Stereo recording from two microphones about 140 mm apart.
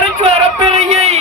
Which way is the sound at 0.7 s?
50° right (ahead or behind).